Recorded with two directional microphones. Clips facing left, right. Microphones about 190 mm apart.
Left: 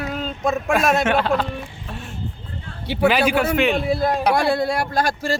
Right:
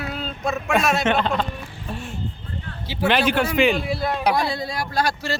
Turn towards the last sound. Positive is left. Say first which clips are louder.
# left 2 dB
turn(degrees=45)  # may be behind; listen again after turning